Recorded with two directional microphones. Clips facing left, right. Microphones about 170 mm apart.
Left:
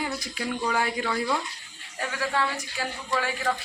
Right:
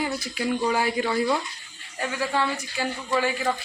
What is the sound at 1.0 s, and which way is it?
Speech, 20° right (ahead or behind).